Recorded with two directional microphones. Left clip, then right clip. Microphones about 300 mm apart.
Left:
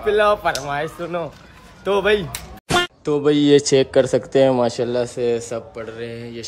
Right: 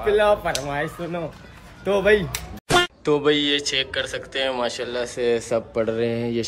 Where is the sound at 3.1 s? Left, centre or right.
Centre.